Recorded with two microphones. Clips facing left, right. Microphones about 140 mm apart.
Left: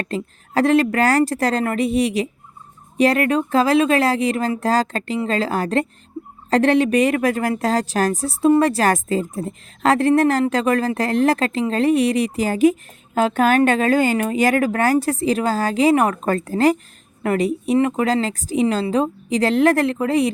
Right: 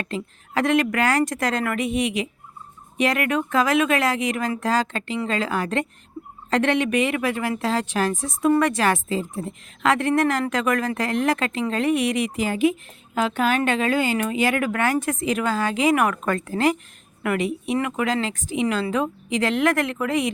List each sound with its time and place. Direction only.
0.0 s a woman's voice: 40° left (ahead or behind)